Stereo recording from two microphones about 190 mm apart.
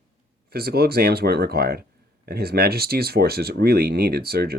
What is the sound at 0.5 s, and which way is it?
Speech, 55° right (ahead or behind).